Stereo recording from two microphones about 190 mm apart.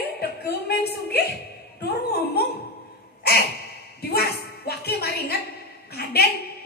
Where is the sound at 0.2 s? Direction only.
55° left (ahead or behind).